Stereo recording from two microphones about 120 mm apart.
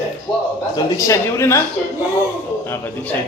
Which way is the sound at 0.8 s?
25° left (ahead or behind).